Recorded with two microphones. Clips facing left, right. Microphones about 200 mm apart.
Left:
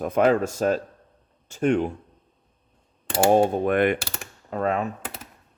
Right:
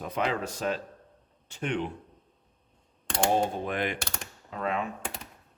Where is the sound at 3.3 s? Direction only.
55° left (ahead or behind).